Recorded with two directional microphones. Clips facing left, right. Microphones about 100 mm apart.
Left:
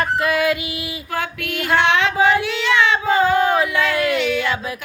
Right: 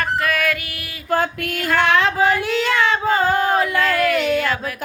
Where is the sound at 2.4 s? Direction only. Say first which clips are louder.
Even; 40° right (ahead or behind).